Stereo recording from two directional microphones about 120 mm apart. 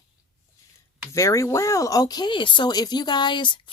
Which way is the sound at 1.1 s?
25° left (ahead or behind).